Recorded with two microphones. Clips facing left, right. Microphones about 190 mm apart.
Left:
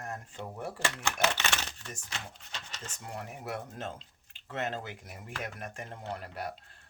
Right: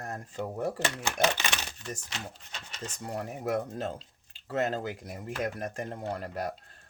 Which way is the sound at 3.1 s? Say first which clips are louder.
Right 7 dB; 40° right (ahead or behind).